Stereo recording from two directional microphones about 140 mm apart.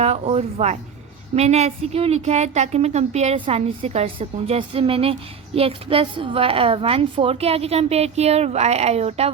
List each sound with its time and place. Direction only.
0.0 s a woman's voice: 50° right (ahead or behind)